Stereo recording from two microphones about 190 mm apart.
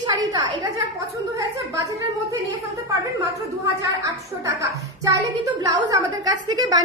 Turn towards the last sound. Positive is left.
turn(degrees=-20)  # may be behind; listen again after turning